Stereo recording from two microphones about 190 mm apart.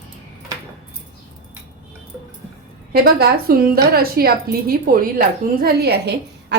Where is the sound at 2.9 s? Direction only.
55° right (ahead or behind).